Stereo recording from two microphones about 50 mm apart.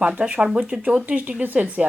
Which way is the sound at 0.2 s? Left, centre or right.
Right.